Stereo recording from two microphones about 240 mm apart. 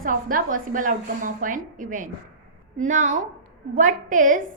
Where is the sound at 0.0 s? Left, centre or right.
Right.